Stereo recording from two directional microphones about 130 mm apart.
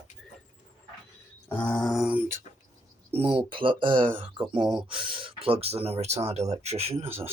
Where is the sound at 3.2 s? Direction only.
40° right (ahead or behind).